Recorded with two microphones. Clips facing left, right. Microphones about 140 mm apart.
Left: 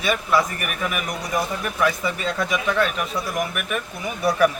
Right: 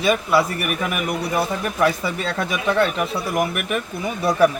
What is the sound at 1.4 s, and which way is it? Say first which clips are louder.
Speech: right 2 dB; 30° right (ahead or behind).